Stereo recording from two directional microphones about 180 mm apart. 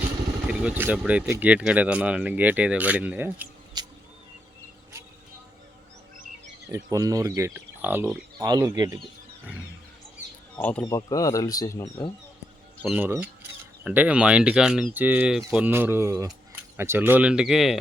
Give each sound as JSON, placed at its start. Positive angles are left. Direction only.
{"t": 0.4, "sound": "speech", "side_deg": -10}
{"t": 3.8, "sound": "a sound", "side_deg": -25}
{"t": 6.7, "sound": "speech", "side_deg": -20}
{"t": 10.6, "sound": "speech", "side_deg": 5}
{"t": 10.8, "sound": "speech", "side_deg": 20}
{"t": 12.8, "sound": "speech", "side_deg": -10}